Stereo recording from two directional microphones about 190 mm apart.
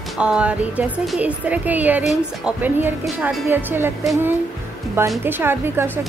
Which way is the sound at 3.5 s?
10° right (ahead or behind).